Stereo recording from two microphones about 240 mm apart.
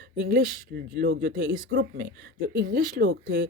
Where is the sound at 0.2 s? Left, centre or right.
Right.